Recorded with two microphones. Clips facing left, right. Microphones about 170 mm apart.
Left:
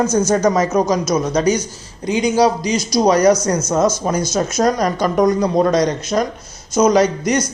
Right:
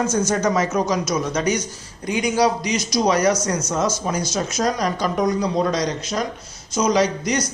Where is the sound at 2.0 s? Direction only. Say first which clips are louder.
Left 4 dB; 25° left (ahead or behind).